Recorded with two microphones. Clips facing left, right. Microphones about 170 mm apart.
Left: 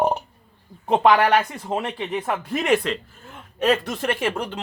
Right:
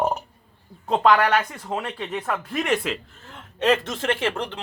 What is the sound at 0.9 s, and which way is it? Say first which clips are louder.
Speech: left 2 dB; 20° left (ahead or behind).